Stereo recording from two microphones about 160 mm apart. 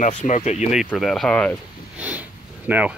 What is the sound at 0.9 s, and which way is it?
Speech, centre (ahead or behind).